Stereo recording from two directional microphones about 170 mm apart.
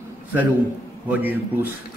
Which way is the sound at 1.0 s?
10° right (ahead or behind).